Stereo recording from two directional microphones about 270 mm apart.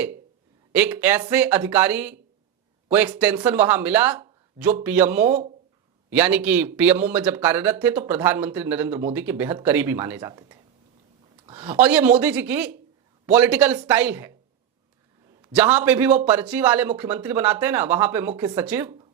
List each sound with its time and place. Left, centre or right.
0.7 s speech: centre
11.4 s a sound: centre
11.7 s speech: centre
15.4 s speech: centre